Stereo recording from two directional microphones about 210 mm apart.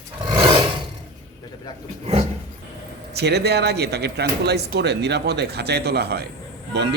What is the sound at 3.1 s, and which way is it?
A man's voice, 50° right (ahead or behind).